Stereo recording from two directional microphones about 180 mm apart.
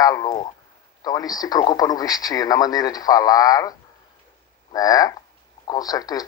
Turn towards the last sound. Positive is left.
turn(degrees=20)  # may be behind; listen again after turning